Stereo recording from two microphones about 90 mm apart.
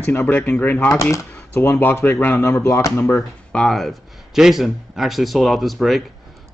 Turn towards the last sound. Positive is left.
turn(degrees=0)  # may be behind; listen again after turning